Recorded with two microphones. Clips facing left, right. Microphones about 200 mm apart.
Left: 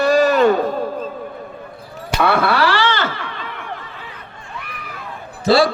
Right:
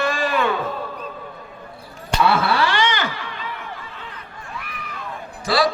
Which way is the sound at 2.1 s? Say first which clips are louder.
Left 2 dB; 55° left (ahead or behind).